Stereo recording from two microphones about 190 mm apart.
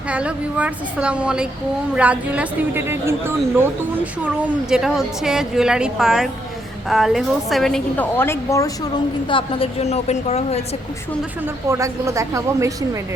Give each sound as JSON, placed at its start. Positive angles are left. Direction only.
{"t": 0.1, "sound": "a woman's voice", "side_deg": -5}
{"t": 4.7, "sound": "a woman's voice", "side_deg": 0}
{"t": 9.3, "sound": "a woman's voice", "side_deg": 30}
{"t": 11.7, "sound": "a woman's voice", "side_deg": -15}